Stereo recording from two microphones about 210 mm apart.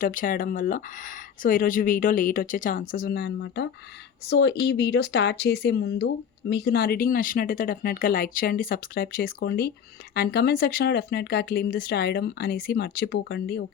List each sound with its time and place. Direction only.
0.0 s speech: 40° left (ahead or behind)